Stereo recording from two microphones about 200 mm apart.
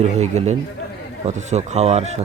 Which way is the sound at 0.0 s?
35° right (ahead or behind).